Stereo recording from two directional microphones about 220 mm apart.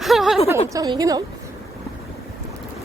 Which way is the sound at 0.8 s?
15° right (ahead or behind).